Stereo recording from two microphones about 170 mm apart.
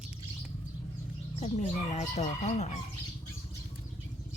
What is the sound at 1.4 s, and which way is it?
Speech, 40° left (ahead or behind).